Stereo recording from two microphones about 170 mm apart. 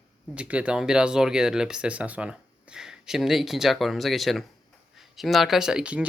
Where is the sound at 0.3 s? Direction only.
10° right (ahead or behind).